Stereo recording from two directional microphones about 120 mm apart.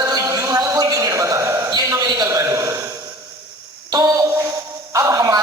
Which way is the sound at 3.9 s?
30° right (ahead or behind).